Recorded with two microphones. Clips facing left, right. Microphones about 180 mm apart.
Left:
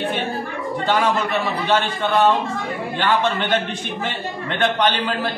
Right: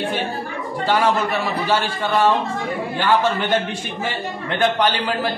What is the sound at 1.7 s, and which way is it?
A man's voice, 10° right (ahead or behind).